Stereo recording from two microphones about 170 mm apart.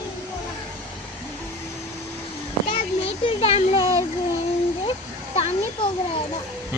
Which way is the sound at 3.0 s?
35° left (ahead or behind).